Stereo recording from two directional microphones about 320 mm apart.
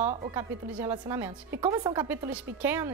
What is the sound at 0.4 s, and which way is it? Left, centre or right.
A woman's voice, centre.